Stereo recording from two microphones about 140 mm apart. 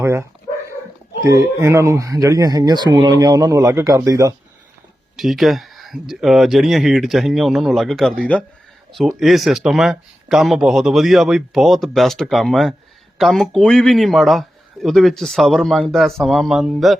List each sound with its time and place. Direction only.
0.0 s speech: 20° right (ahead or behind)
5.1 s speech: centre (ahead or behind)